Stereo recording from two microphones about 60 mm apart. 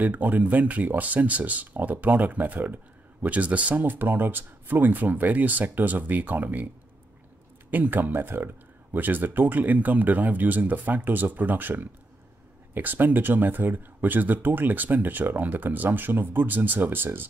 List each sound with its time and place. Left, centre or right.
0.0 s speech: right
7.7 s speech: right